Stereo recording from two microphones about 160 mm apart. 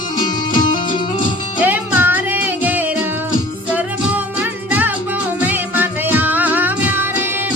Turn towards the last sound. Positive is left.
turn(degrees=-10)  # may be behind; listen again after turning